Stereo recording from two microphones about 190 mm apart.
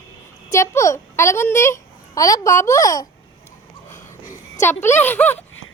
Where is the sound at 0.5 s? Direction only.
15° left (ahead or behind).